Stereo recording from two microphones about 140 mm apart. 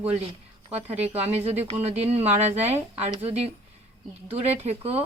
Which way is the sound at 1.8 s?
50° right (ahead or behind).